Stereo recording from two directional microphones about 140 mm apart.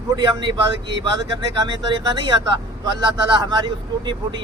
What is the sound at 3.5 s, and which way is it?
Speech, 30° right (ahead or behind).